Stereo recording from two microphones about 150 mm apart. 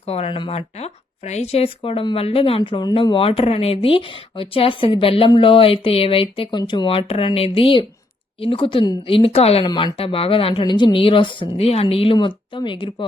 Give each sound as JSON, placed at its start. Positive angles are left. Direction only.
{"t": 0.1, "sound": "speech", "side_deg": 40}